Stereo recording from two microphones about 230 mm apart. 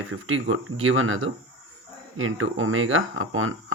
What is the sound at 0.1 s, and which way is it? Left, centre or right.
Speech, right.